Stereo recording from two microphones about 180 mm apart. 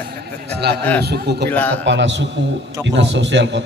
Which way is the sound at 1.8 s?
80° right.